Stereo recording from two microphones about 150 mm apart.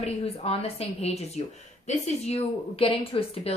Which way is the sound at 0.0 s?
40° left (ahead or behind).